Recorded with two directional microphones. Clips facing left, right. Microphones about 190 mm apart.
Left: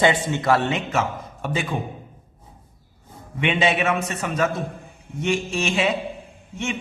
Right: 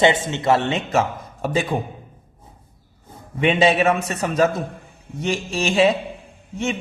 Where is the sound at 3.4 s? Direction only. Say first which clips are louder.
Right 4 dB; 35° right (ahead or behind).